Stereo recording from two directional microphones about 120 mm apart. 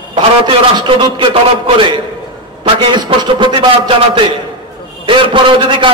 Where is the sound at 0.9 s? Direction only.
45° right (ahead or behind).